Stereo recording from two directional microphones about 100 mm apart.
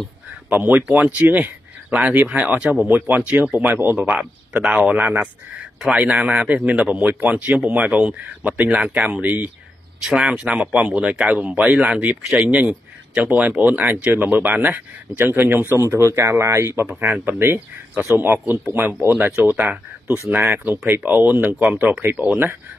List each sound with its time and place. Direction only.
0.5 s speech: 15° right (ahead or behind)